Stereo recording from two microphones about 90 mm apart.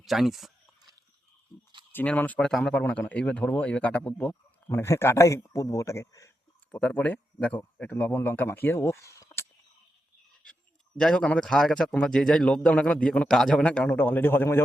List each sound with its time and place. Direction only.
0.0 s speech: centre (ahead or behind)
1.9 s a man's voice: 20° left (ahead or behind)
2.4 s speech: 5° left (ahead or behind)
3.1 s speech: 15° left (ahead or behind)
4.7 s a man's voice: 30° left (ahead or behind)
6.7 s speech: 10° left (ahead or behind); by 9.5 s 30° left (ahead or behind)
10.4 s a man's voice: 10° left (ahead or behind); by 14.6 s 25° left (ahead or behind)